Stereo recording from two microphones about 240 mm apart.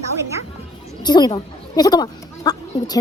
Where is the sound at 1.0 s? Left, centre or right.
Centre.